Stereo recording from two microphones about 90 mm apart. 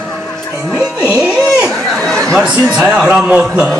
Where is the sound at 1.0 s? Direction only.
15° right (ahead or behind).